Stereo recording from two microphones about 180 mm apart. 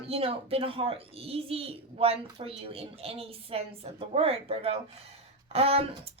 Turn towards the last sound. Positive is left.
turn(degrees=-35)  # may be behind; listen again after turning